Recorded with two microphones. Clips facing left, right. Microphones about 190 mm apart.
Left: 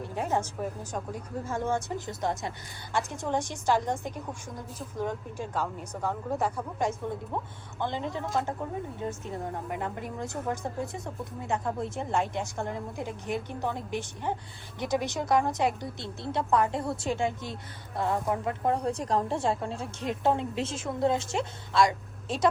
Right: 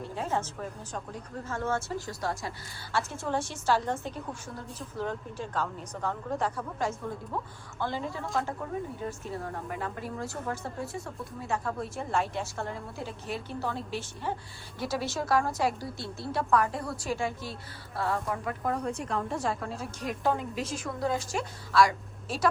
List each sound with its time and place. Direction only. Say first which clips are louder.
0.0 s a woman's voice: left 2 dB; 15° left (ahead or behind)